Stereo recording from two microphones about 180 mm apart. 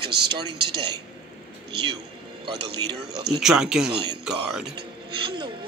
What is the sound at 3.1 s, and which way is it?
Speech, 65° right (ahead or behind).